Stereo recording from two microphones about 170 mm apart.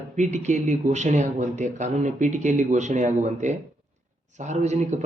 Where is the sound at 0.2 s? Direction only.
45° right (ahead or behind).